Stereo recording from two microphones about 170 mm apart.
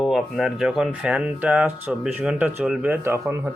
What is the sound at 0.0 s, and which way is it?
Speech, centre (ahead or behind).